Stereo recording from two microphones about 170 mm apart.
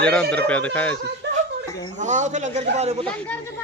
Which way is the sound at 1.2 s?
85° right.